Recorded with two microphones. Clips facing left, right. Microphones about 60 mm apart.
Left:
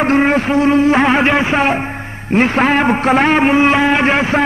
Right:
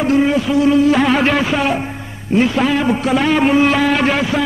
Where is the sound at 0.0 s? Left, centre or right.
Left.